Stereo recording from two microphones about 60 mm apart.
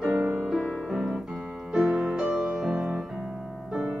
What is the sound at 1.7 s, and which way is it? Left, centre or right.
Music, centre.